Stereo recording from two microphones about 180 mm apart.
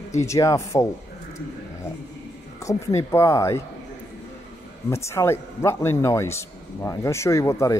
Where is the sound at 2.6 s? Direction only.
15° left (ahead or behind).